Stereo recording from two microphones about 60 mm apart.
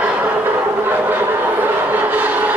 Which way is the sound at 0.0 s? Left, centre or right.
Right.